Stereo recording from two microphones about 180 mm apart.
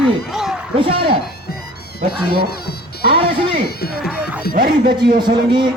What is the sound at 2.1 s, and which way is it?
Speech, 60° left (ahead or behind).